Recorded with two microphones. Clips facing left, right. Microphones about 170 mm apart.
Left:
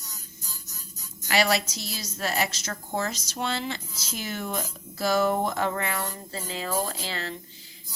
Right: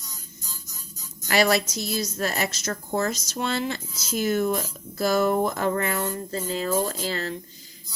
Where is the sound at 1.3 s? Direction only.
50° right (ahead or behind).